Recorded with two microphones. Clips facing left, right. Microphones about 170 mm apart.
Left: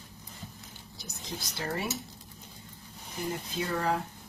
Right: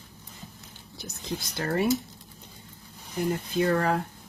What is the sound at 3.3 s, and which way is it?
Speech, 60° right (ahead or behind).